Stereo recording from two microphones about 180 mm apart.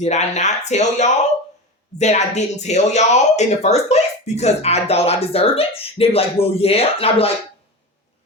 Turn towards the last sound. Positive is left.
turn(degrees=35)  # may be behind; listen again after turning